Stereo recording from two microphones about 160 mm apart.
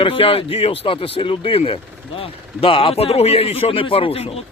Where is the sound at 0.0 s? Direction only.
35° left (ahead or behind).